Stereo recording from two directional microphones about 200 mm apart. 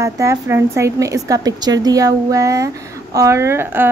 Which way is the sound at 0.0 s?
15° right (ahead or behind).